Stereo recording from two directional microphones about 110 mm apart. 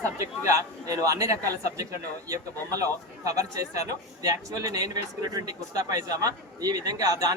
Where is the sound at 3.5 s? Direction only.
35° right (ahead or behind).